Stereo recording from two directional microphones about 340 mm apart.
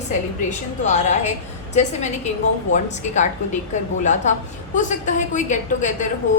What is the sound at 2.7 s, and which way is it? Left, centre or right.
A woman's voice, left.